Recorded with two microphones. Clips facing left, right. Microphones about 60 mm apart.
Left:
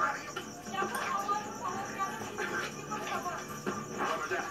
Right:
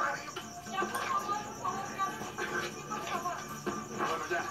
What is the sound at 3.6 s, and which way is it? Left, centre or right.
Music, centre.